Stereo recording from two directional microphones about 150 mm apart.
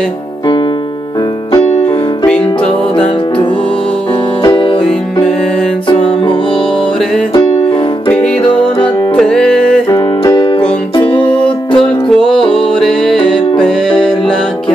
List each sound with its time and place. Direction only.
2.2 s music: 10° left (ahead or behind)
4.4 s music: 30° left (ahead or behind)
8.1 s music: 5° left (ahead or behind)
9.8 s music: 25° left (ahead or behind)
11.2 s music: 10° left (ahead or behind)